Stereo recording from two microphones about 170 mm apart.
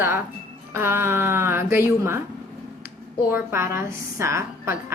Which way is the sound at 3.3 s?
15° right (ahead or behind).